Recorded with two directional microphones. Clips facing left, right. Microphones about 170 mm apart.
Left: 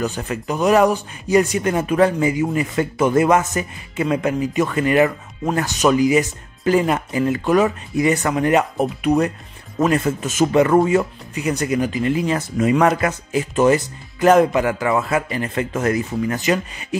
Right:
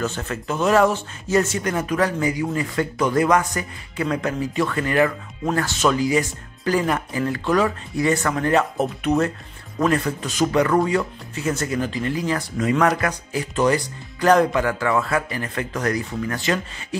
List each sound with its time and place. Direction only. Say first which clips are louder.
0.0 s speech: left 3 dB; 15° left (ahead or behind)
9.8 s speech: left 3 dB; 25° left (ahead or behind)